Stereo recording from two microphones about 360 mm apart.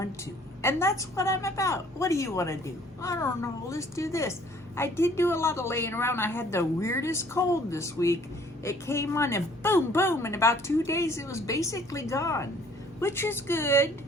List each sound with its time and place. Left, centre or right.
0.6 s speech: centre